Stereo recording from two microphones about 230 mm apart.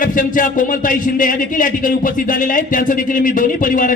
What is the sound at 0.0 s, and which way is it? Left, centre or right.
A man's voice, left.